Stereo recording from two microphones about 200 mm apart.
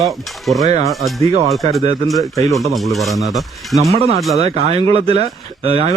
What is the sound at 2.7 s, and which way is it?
Speech, centre (ahead or behind).